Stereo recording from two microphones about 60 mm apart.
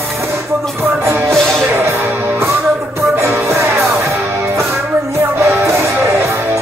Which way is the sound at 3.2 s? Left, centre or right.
Right.